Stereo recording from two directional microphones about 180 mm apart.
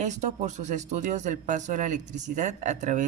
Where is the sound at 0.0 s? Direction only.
40° right (ahead or behind).